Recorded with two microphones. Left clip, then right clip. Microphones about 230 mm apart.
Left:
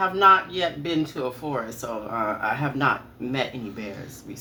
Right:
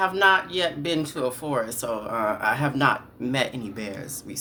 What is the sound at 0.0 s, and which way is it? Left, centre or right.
Speech, right.